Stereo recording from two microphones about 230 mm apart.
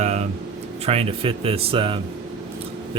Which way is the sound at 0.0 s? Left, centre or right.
Right.